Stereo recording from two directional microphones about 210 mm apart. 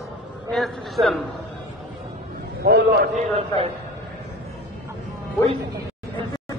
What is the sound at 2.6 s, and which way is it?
Speech, 50° right (ahead or behind).